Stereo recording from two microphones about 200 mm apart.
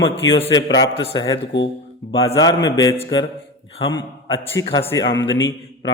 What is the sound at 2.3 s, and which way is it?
A man's voice, 20° left (ahead or behind).